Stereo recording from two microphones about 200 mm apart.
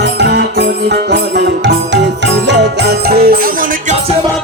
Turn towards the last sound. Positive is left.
turn(degrees=-50)  # may be behind; listen again after turning